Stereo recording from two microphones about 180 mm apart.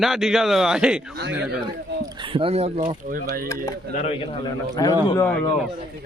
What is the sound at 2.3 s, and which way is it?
Speech, 35° right (ahead or behind).